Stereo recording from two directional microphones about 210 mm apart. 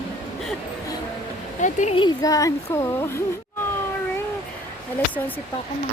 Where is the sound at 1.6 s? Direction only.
35° left (ahead or behind).